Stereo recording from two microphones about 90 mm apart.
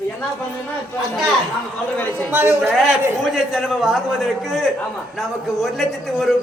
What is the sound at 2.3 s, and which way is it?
Speech, 25° right (ahead or behind).